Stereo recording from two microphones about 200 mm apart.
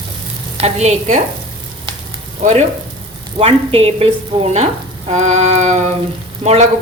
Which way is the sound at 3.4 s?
30° right (ahead or behind).